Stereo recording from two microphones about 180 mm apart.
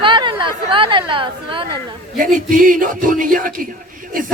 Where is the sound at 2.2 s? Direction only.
50° right (ahead or behind).